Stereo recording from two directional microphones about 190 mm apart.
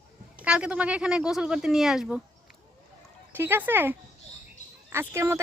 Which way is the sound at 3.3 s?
10° right (ahead or behind).